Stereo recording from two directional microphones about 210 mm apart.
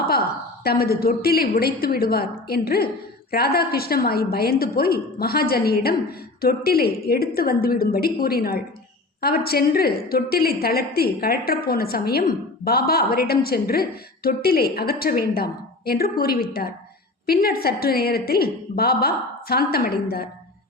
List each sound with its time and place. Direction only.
0.6 s a woman's voice: 45° left (ahead or behind)